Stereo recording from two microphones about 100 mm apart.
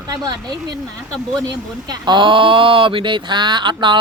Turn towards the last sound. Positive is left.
turn(degrees=-50)  # may be behind; listen again after turning